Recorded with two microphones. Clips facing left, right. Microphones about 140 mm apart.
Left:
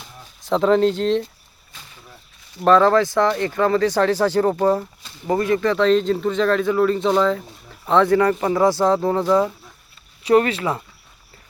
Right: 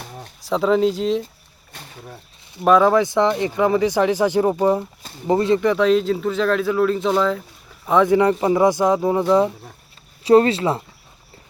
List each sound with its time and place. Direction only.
0.0 s a sound: 55° right (ahead or behind)
0.4 s a man's voice: 5° right (ahead or behind)
1.7 s speech: 55° right (ahead or behind)
2.6 s speech: 10° right (ahead or behind)
5.3 s a man's voice: 25° right (ahead or behind); by 7.4 s centre (ahead or behind)
7.9 s speech: 15° right (ahead or behind)
10.2 s speech: 30° right (ahead or behind)